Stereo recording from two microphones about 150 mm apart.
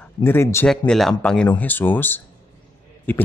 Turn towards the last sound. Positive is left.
turn(degrees=15)  # may be behind; listen again after turning